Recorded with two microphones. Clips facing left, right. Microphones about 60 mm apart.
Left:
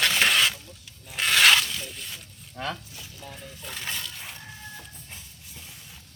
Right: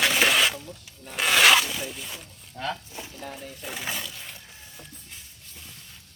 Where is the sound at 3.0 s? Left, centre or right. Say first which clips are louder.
Right 6 dB; right.